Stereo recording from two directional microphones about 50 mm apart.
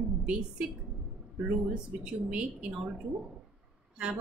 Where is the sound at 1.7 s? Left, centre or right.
Right.